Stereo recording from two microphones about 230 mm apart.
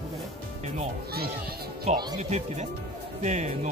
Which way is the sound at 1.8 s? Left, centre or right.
Right.